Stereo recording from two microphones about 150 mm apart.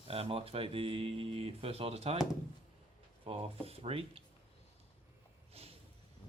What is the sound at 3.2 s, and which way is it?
Speech, 40° right (ahead or behind).